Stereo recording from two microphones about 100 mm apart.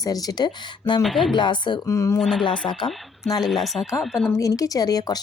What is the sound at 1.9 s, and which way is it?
Speech, 30° left (ahead or behind).